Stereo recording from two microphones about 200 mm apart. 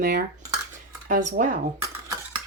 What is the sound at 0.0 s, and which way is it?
Speech, 45° right (ahead or behind).